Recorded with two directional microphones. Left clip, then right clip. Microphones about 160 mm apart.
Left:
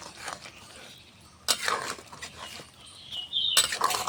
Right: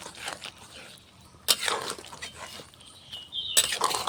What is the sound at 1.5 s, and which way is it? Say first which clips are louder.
Dishes: right 1 dB; 20° right (ahead or behind).